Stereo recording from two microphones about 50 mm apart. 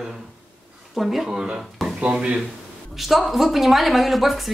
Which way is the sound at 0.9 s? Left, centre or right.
Centre.